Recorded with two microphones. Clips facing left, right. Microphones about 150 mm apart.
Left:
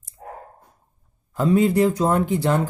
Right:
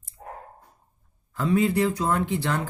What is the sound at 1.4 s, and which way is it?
Speech, 40° left (ahead or behind).